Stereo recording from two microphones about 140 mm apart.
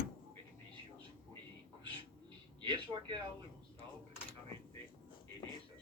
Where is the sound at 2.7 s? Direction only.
30° right (ahead or behind).